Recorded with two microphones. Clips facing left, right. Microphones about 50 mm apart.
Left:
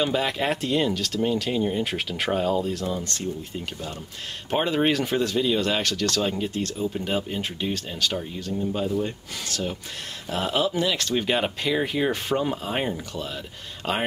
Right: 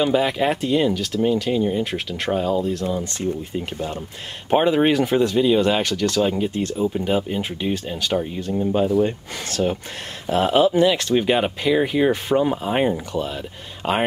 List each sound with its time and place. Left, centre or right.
0.0 s speech: centre
3.0 s speech: centre
4.6 s speech: centre
9.5 s speech: right; by 14.0 s centre